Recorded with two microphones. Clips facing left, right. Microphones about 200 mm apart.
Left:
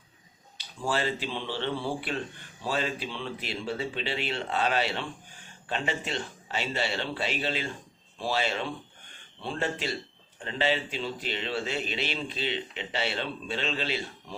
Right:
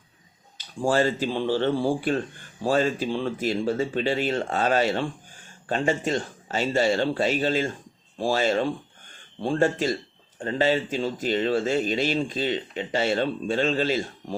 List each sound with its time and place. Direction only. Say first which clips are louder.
0.8 s speech: right 7 dB; 45° right (ahead or behind)